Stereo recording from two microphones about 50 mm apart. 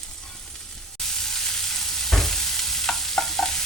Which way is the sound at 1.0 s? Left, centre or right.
Centre.